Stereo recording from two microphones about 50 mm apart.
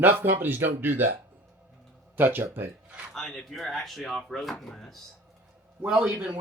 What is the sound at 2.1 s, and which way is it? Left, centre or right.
Speech, right.